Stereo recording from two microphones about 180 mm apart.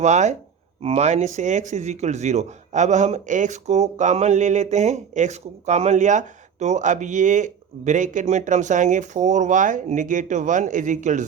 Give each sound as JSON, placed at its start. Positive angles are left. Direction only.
{"t": 0.0, "sound": "speech", "side_deg": -40}